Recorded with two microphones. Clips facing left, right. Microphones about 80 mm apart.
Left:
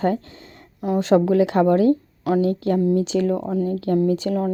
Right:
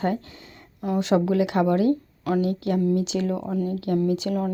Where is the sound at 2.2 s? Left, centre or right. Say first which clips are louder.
Left 4 dB; left.